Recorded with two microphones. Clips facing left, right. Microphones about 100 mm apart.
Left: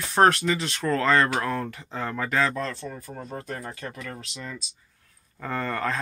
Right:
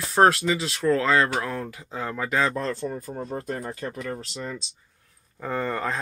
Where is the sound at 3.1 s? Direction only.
30° right (ahead or behind).